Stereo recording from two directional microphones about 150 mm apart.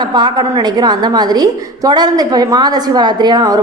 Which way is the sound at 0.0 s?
30° right (ahead or behind).